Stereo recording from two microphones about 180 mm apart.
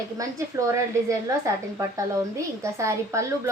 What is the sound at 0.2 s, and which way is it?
A woman's voice, 20° right (ahead or behind).